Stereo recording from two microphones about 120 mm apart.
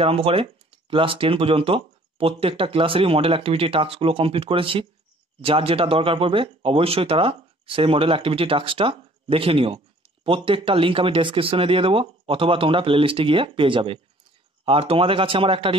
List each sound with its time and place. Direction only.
0.0 s speech: 50° right (ahead or behind)